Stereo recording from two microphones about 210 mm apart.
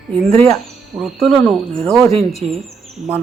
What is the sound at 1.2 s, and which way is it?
Speech, centre (ahead or behind).